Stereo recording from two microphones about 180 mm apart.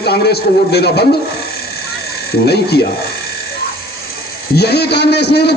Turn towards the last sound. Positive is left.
turn(degrees=65)  # may be behind; listen again after turning